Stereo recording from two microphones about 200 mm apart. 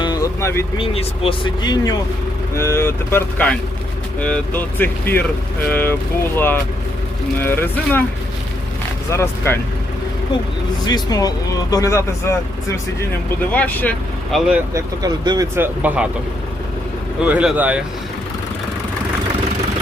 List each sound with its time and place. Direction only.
0.0 s vehicle: 20° left (ahead or behind)
0.8 s speech: 25° left (ahead or behind); by 8.0 s 10° left (ahead or behind)
9.0 s speech: 15° left (ahead or behind)
10.8 s speech: 20° left (ahead or behind); by 14.6 s centre (ahead or behind)
14.7 s speech: 15° right (ahead or behind)
17.2 s speech: 10° right (ahead or behind)